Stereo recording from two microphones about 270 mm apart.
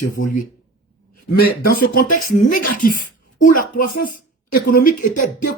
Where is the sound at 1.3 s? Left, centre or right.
Left.